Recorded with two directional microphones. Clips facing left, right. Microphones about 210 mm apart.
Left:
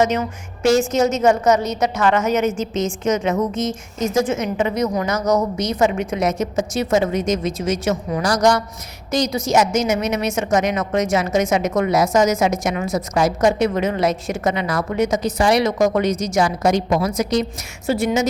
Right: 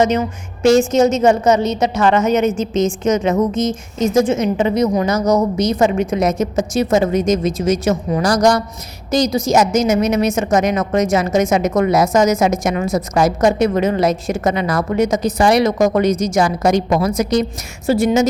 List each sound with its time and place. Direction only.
0.0 s a woman's voice: 30° right (ahead or behind)